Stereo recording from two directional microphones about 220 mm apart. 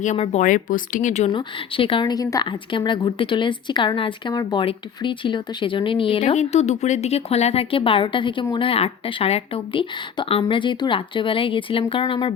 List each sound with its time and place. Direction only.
0.0 s speech: 35° left (ahead or behind)
1.3 s a woman's voice: 20° left (ahead or behind)